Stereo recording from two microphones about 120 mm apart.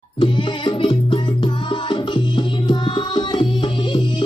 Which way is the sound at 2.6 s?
40° left (ahead or behind).